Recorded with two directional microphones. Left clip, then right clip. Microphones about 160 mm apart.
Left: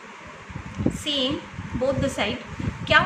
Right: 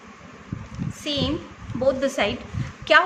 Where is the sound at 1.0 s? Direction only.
40° right (ahead or behind).